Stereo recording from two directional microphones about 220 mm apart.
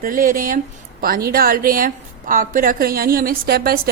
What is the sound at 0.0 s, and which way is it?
A woman's voice, 40° right (ahead or behind).